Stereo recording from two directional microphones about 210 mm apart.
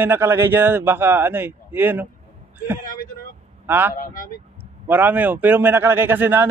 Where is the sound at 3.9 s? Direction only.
40° left (ahead or behind).